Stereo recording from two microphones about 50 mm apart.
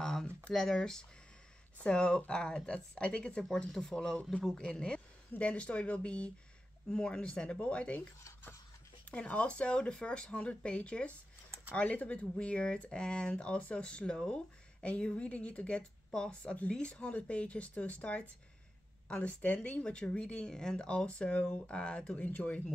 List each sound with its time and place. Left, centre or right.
0.0 s a sound: centre
0.5 s speech: centre
1.8 s speech: left
3.4 s speech: centre; by 8.1 s left
9.1 s speech: left